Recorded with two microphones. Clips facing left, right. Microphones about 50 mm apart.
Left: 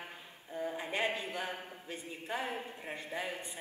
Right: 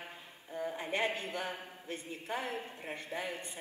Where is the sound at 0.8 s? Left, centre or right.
Right.